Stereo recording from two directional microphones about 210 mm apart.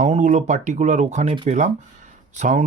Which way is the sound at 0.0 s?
35° right (ahead or behind).